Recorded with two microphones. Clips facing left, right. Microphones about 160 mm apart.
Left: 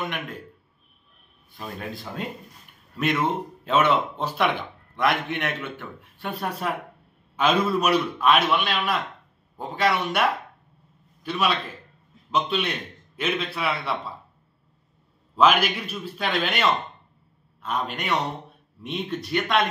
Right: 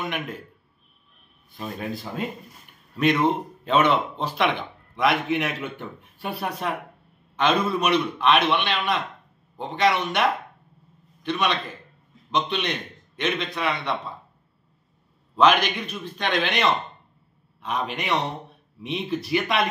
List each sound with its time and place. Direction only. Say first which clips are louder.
1.6 s speech: right 3 dB; centre (ahead or behind)
3.6 s speech: right 1 dB; 5° left (ahead or behind)
5.8 s speech: right 2 dB; 15° right (ahead or behind)
6.3 s speech: even; centre (ahead or behind)
11.2 s a man's voice: even; 5° left (ahead or behind)
15.3 s a man's voice: right 1 dB; 5° left (ahead or behind)